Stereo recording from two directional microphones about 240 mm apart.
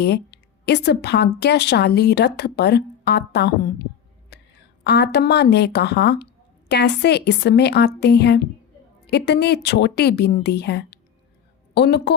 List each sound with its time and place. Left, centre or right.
0.0 s a woman's voice: left
4.3 s a sound: left
4.8 s a woman's voice: left